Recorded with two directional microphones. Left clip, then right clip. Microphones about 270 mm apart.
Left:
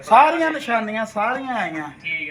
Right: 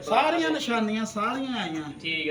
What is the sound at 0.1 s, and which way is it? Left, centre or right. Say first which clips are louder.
Speech: left 9 dB; left.